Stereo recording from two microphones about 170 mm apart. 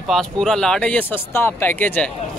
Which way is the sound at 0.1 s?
Centre (ahead or behind).